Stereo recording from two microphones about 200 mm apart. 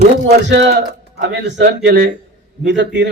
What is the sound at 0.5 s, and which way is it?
A man's voice, 60° right (ahead or behind).